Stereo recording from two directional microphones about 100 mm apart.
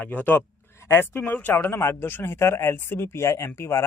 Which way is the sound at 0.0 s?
15° left (ahead or behind).